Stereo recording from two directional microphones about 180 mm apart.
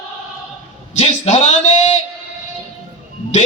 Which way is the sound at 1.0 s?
35° left (ahead or behind).